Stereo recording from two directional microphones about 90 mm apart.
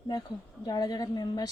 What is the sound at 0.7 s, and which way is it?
Speech, 50° left (ahead or behind).